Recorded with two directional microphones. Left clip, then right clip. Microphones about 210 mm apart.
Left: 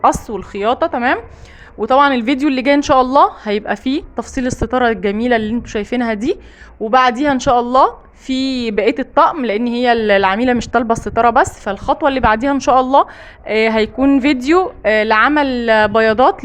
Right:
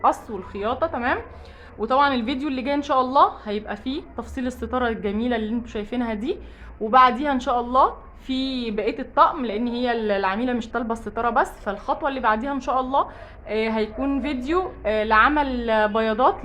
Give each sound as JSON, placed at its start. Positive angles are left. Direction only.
{"t": 0.0, "sound": "a woman's voice", "side_deg": 40}